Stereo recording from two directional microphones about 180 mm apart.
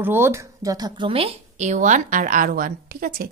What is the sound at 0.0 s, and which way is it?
Speech, 15° right (ahead or behind).